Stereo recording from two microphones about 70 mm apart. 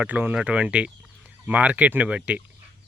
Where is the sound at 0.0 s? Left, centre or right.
Right.